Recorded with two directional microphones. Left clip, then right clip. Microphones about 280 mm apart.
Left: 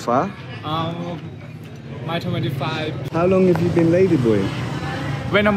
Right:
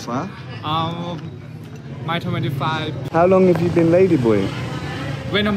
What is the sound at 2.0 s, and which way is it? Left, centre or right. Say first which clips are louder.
Speech: right 1 dB; centre.